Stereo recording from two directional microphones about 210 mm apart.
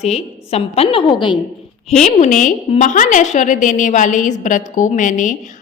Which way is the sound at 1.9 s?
35° left (ahead or behind).